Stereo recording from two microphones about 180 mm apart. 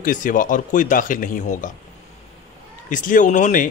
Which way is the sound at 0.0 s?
45° left (ahead or behind).